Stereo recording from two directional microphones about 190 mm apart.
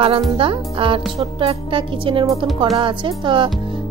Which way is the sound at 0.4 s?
30° right (ahead or behind).